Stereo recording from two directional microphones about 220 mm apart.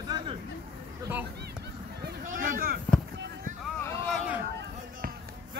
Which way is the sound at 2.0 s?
40° right (ahead or behind).